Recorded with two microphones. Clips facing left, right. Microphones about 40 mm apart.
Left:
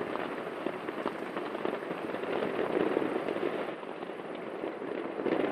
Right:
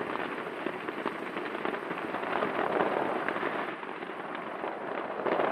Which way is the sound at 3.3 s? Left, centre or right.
Right.